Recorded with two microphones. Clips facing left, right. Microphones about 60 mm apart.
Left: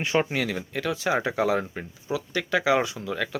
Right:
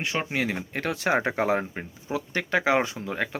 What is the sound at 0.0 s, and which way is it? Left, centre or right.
Speech, centre.